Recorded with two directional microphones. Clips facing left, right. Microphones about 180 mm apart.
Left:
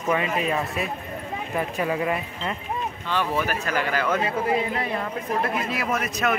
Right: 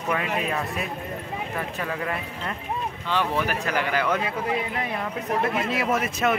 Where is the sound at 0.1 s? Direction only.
5° left (ahead or behind).